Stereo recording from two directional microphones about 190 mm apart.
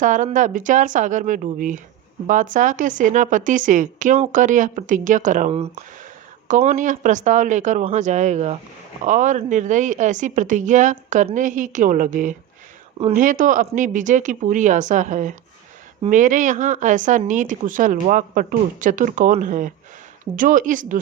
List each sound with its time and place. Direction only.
0.0 s a woman's voice: 45° right (ahead or behind)